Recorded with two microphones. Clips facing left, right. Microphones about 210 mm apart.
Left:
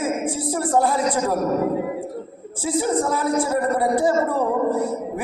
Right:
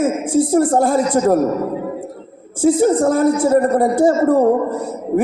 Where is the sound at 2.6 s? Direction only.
50° right (ahead or behind).